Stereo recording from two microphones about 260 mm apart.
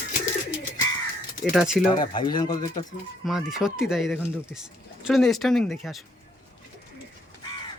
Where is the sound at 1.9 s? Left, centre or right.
Centre.